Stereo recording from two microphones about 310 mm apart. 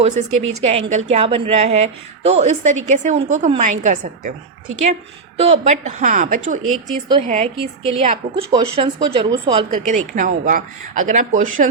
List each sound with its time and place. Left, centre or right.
0.3 s a woman's voice: right
0.6 s a woman's voice: right
5.4 s a woman's voice: right